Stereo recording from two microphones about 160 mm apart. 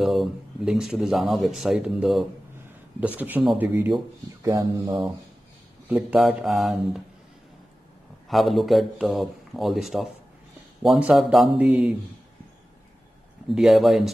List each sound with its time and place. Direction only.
0.0 s speech: centre (ahead or behind); by 5.0 s 20° right (ahead or behind)
5.9 s speech: 10° right (ahead or behind)
8.3 s speech: centre (ahead or behind)
13.5 s speech: centre (ahead or behind)